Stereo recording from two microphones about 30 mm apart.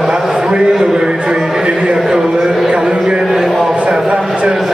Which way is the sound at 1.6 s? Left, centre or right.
Right.